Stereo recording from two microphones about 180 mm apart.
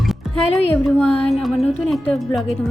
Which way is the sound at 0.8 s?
5° left (ahead or behind).